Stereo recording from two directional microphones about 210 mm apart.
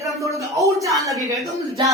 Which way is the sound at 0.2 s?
15° right (ahead or behind).